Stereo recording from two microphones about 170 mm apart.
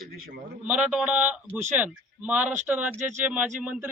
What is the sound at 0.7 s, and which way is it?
A man's voice, 5° right (ahead or behind).